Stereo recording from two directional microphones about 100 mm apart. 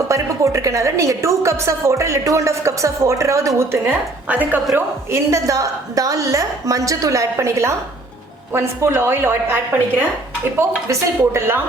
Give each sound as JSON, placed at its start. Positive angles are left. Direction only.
{"t": 0.1, "sound": "a woman's voice", "side_deg": -30}
{"t": 4.7, "sound": "a woman's voice", "side_deg": -30}
{"t": 10.8, "sound": "a woman's voice", "side_deg": -25}